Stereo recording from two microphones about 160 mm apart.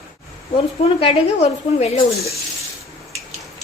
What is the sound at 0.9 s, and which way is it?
Speech, 35° left (ahead or behind).